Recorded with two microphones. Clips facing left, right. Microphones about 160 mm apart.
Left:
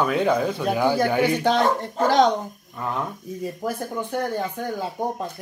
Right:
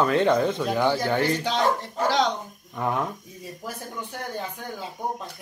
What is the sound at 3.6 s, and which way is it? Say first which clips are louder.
Speech: left 6 dB; 60° left (ahead or behind).